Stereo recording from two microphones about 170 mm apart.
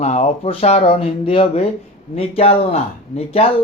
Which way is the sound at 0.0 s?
40° left (ahead or behind).